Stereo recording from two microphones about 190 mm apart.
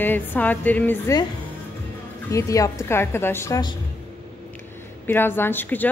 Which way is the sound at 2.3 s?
15° left (ahead or behind).